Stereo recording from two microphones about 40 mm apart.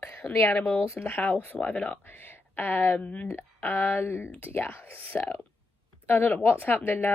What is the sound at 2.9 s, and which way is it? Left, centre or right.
Speech, left.